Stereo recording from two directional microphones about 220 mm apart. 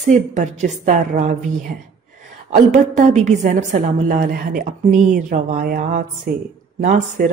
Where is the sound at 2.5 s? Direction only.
35° right (ahead or behind).